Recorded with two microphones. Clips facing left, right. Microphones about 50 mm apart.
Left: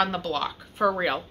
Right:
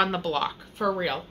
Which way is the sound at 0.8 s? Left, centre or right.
Centre.